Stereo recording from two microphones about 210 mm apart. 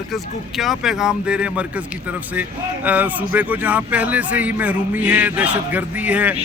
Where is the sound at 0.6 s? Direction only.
Centre (ahead or behind).